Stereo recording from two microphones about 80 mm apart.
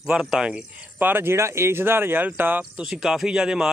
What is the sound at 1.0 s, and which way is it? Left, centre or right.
Speech, right.